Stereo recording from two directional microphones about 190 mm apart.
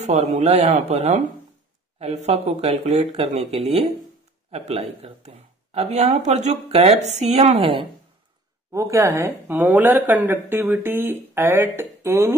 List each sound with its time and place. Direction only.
0.0 s speech: 35° right (ahead or behind)
2.2 s speech: 30° right (ahead or behind)
8.7 s a woman's voice: 15° right (ahead or behind)